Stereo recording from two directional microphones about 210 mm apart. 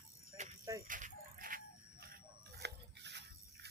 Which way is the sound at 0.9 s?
40° right (ahead or behind).